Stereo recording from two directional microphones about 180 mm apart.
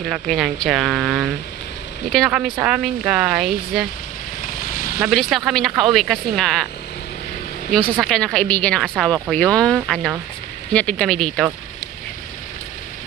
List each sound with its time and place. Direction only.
0.1 s speech: centre (ahead or behind)
5.0 s speech: centre (ahead or behind)
7.7 s speech: 5° left (ahead or behind)